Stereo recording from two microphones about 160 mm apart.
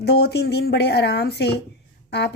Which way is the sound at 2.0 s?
90° left.